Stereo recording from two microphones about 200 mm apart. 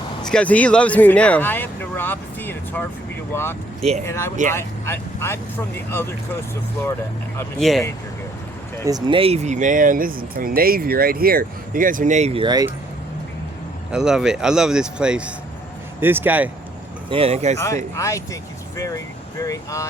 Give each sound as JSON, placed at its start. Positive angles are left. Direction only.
{"t": 0.3, "sound": "speech", "side_deg": 5}
{"t": 4.0, "sound": "speech", "side_deg": 10}
{"t": 7.6, "sound": "speech", "side_deg": 0}
{"t": 8.9, "sound": "speech", "side_deg": -20}
{"t": 13.9, "sound": "speech", "side_deg": -5}
{"t": 17.1, "sound": "speech", "side_deg": -30}
{"t": 17.9, "sound": "speech", "side_deg": 15}